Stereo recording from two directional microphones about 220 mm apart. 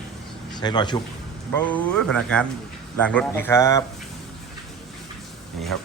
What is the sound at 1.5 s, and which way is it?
Speech, 5° left (ahead or behind).